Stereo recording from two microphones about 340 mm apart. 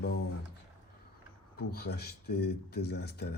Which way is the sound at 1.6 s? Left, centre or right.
Left.